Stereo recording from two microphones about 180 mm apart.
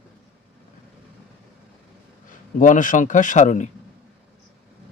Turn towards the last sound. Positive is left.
turn(degrees=40)  # may be behind; listen again after turning